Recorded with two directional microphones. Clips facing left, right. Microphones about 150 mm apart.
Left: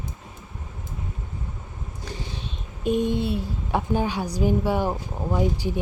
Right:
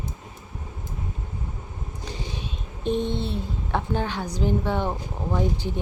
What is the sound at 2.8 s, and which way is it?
Speech, 10° left (ahead or behind).